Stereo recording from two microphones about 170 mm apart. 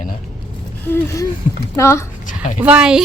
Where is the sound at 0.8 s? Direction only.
15° left (ahead or behind).